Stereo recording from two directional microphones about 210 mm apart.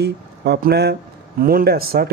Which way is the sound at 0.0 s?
50° right (ahead or behind).